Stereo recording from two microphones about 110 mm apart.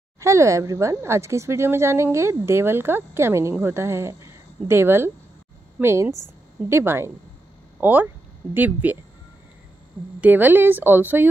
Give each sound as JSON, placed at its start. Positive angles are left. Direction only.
{"t": 0.2, "sound": "a woman's voice", "side_deg": -30}
{"t": 10.2, "sound": "speech", "side_deg": -15}